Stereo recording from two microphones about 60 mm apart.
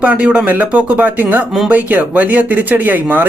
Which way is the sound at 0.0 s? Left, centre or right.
Right.